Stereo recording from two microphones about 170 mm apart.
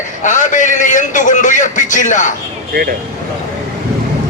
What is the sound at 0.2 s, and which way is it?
A man's voice, 45° left (ahead or behind).